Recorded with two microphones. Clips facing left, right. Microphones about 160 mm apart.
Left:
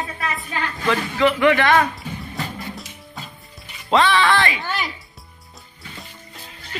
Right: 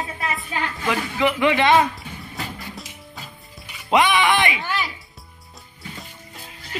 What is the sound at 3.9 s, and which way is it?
Speech, 15° right (ahead or behind).